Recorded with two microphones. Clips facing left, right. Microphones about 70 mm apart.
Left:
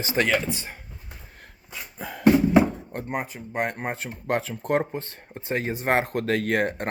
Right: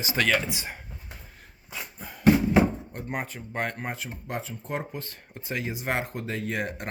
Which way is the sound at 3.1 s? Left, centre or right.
Centre.